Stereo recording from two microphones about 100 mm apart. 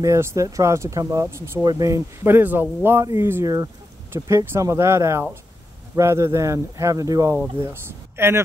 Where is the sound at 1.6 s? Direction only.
35° right (ahead or behind).